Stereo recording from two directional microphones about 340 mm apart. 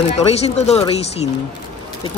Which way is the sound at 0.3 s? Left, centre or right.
Centre.